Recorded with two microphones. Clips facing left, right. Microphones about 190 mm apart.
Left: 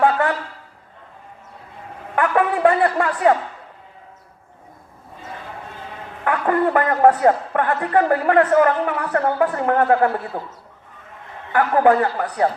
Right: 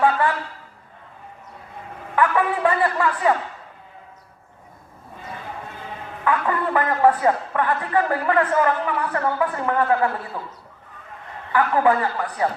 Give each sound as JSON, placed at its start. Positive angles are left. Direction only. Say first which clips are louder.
{"t": 0.0, "sound": "a sound", "louder": "left 2 dB", "side_deg": 50}
{"t": 2.1, "sound": "speech", "louder": "left 2 dB", "side_deg": 55}
{"t": 6.2, "sound": "a woman's voice", "louder": "left 4 dB", "side_deg": 50}
{"t": 11.5, "sound": "a woman's voice", "louder": "left 3 dB", "side_deg": 55}